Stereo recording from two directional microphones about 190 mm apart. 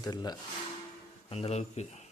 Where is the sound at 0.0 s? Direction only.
20° left (ahead or behind).